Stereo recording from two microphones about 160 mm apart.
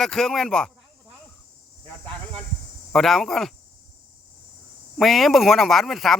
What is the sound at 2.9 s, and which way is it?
Speech, centre (ahead or behind).